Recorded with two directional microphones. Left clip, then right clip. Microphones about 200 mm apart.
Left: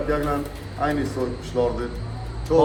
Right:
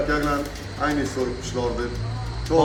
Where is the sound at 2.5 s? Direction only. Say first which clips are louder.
Left 1 dB; 20° left (ahead or behind).